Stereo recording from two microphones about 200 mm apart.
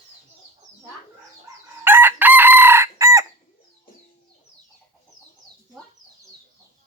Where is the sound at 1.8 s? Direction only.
10° right (ahead or behind).